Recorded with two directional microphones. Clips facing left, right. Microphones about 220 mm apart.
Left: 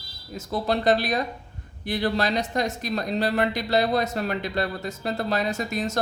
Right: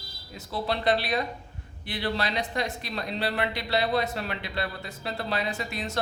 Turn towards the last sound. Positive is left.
turn(degrees=45)  # may be behind; listen again after turning